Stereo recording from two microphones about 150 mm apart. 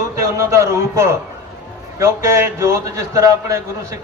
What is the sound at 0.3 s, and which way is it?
A man's voice, 20° right (ahead or behind).